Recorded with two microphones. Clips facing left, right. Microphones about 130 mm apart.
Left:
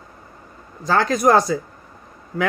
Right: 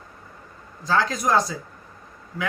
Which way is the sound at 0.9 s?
55° left (ahead or behind).